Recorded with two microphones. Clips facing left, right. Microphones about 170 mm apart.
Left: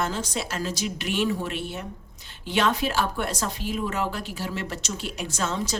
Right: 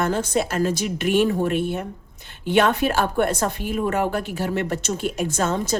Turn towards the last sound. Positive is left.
turn(degrees=-50)  # may be behind; listen again after turning